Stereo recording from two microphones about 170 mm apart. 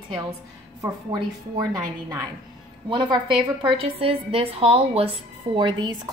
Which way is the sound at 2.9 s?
30° right (ahead or behind).